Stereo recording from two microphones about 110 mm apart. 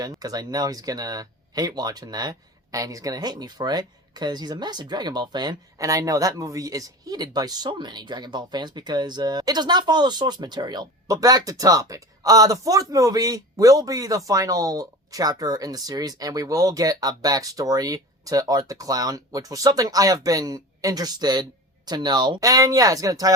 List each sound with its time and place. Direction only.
0.2 s speech: 35° right (ahead or behind)